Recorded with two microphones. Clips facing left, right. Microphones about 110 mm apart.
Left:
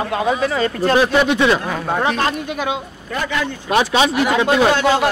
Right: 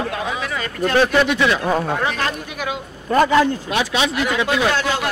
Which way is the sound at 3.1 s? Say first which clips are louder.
Right 8 dB; 35° right (ahead or behind).